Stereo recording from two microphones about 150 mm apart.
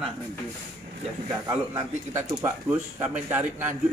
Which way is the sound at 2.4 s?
15° right (ahead or behind).